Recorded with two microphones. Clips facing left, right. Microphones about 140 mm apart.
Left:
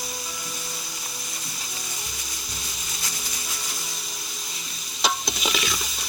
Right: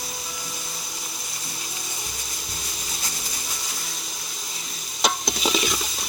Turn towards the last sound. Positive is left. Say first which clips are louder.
# right 4 dB
turn(degrees=-30)  # may be behind; listen again after turning